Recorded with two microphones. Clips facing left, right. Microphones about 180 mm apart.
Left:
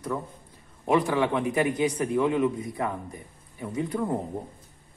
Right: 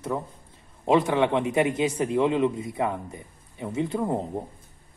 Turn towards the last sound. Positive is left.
turn(degrees=-25)  # may be behind; listen again after turning